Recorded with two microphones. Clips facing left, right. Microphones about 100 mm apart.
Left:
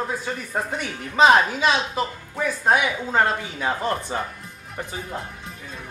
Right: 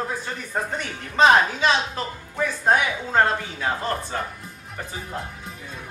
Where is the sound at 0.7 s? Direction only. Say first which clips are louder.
Left 1 dB; 5° left (ahead or behind).